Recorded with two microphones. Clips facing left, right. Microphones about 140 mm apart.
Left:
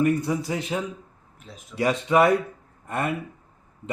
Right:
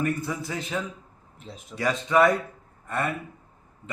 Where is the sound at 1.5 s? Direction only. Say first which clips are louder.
Right 2 dB; 25° right (ahead or behind).